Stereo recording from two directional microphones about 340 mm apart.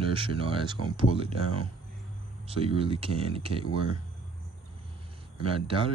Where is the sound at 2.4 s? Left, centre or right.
Centre.